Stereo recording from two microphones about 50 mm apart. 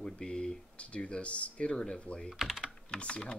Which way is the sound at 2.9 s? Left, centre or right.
Left.